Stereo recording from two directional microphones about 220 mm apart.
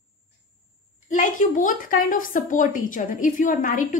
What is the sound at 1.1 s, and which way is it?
A woman's voice, 35° left (ahead or behind).